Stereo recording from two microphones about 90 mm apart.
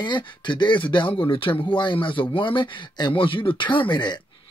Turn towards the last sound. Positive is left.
turn(degrees=60)  # may be behind; listen again after turning